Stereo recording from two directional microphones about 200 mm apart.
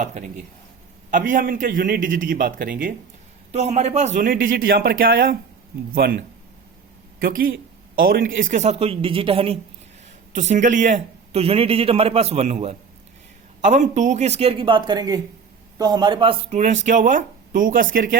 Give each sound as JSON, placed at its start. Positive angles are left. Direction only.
{"t": 0.0, "sound": "a man's voice", "side_deg": -35}
{"t": 3.5, "sound": "a man's voice", "side_deg": -35}